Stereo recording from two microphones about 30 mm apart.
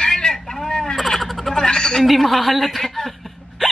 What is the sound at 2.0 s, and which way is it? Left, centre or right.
A man's voice, centre.